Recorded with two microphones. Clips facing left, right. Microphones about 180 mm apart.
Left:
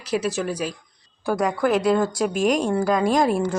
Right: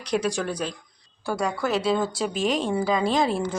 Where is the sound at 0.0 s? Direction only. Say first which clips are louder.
Left 1 dB; 5° left (ahead or behind).